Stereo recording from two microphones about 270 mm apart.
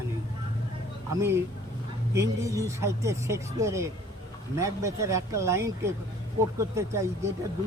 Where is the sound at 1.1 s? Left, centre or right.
Centre.